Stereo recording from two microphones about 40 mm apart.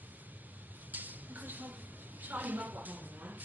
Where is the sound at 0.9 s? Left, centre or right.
Right.